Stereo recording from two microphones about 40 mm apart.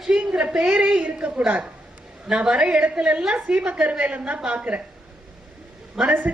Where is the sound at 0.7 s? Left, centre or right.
Right.